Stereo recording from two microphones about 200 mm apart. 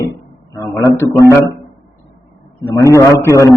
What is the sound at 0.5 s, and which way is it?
Speech, 10° left (ahead or behind).